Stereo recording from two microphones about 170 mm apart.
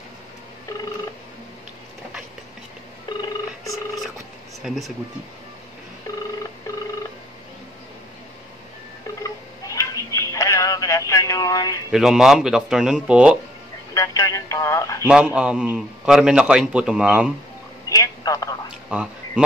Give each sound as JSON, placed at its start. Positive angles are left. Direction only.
{"t": 3.1, "sound": "telephone", "side_deg": 25}
{"t": 4.6, "sound": "a man's voice", "side_deg": 0}
{"t": 9.2, "sound": "telephone", "side_deg": 20}
{"t": 11.9, "sound": "a man's voice", "side_deg": -5}
{"t": 13.9, "sound": "telephone", "side_deg": 20}
{"t": 15.0, "sound": "a man's voice", "side_deg": -5}
{"t": 17.8, "sound": "telephone", "side_deg": 20}
{"t": 18.9, "sound": "a sound", "side_deg": -5}